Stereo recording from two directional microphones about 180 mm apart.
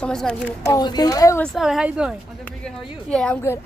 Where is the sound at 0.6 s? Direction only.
20° left (ahead or behind).